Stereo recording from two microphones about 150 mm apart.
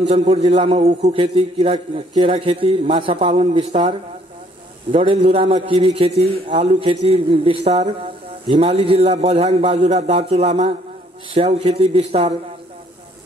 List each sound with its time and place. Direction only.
0.1 s a man's voice: 45° right (ahead or behind)
5.0 s a man's voice: 40° right (ahead or behind)